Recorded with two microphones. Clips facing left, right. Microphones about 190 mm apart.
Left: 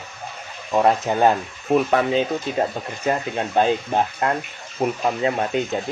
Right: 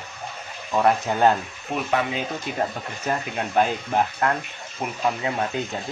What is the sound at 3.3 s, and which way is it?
Speech, 25° left (ahead or behind).